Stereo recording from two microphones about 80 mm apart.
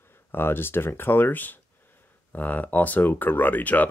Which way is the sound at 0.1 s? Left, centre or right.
Left.